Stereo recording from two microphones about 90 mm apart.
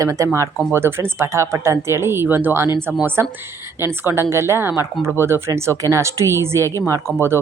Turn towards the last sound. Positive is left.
turn(degrees=-30)  # may be behind; listen again after turning